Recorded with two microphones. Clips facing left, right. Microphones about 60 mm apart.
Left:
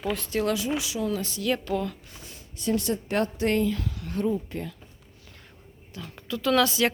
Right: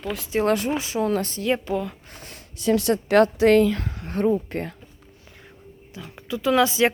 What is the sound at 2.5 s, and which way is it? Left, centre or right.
A woman's voice, right.